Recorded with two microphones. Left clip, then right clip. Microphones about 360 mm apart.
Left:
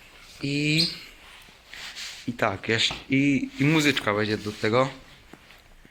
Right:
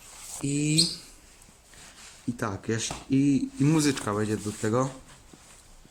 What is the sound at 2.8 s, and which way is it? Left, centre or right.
Speech, centre.